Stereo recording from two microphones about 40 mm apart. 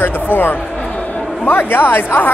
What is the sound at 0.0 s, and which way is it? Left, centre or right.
Speech, left.